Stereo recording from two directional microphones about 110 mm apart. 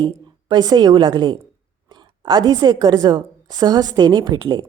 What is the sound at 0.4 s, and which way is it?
A woman's voice, 40° right (ahead or behind).